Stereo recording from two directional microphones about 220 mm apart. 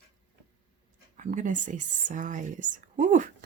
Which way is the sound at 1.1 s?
35° right (ahead or behind).